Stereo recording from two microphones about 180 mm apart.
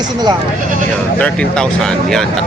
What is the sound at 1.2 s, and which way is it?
Speech, 5° left (ahead or behind).